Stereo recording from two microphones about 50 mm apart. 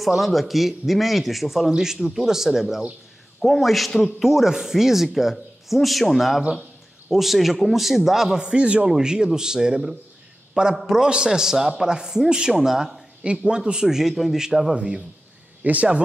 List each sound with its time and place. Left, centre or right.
0.0 s a man's voice: centre
3.3 s a man's voice: centre; by 8.8 s right
8.8 s a man's voice: centre
15.6 s speech: right